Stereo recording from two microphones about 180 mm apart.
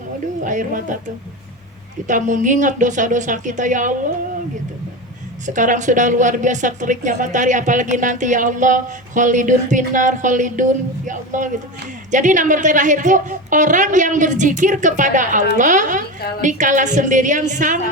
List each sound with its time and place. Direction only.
0.4 s speech: 45° right (ahead or behind)
2.0 s speech: 45° right (ahead or behind)
5.5 s speech: 45° right (ahead or behind)